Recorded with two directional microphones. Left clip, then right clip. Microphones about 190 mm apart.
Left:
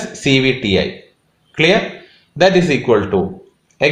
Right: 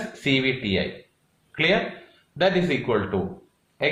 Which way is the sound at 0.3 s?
55° left (ahead or behind).